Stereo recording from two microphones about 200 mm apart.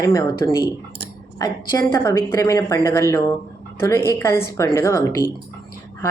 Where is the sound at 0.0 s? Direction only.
15° left (ahead or behind).